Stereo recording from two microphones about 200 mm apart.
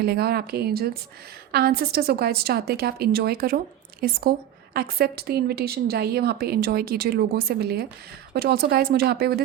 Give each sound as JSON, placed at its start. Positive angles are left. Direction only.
{"t": 0.0, "sound": "a woman's voice", "side_deg": -50}